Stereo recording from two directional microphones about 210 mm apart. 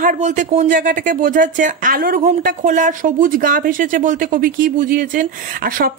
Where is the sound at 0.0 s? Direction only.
35° right (ahead or behind).